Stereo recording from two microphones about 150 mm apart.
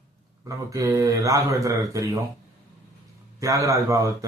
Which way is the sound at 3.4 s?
20° right (ahead or behind).